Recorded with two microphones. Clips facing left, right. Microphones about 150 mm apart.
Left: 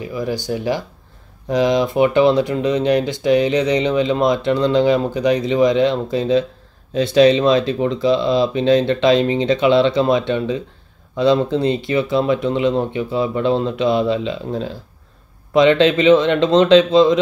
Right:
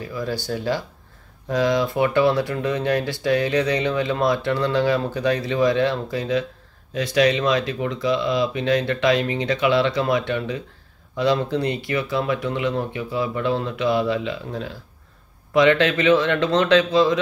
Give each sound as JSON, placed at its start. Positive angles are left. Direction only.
{"t": 0.0, "sound": "speech", "side_deg": 15}